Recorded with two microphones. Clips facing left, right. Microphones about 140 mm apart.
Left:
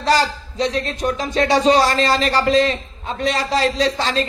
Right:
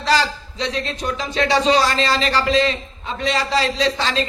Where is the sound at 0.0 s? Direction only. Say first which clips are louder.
Left 2 dB; 45° left (ahead or behind).